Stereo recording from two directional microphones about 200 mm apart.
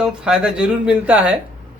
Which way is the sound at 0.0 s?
5° right (ahead or behind).